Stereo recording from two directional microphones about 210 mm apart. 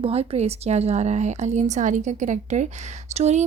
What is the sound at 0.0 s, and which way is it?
Speech, 30° right (ahead or behind).